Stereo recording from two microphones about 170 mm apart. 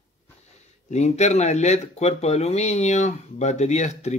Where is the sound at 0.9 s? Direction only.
40° left (ahead or behind).